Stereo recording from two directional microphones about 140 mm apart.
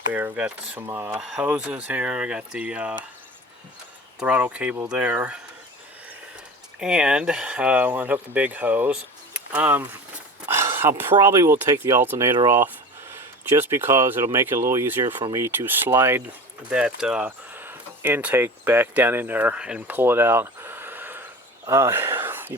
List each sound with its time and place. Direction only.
0.1 s speech: 10° right (ahead or behind)
1.2 s speech: 5° right (ahead or behind)
4.2 s speech: 10° right (ahead or behind)
6.7 s speech: 5° right (ahead or behind)
16.6 s speech: 5° right (ahead or behind)